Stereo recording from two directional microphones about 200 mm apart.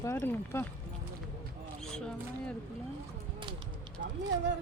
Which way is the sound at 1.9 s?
5° left (ahead or behind).